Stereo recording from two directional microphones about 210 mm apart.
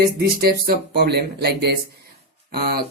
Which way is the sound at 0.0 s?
50° right (ahead or behind).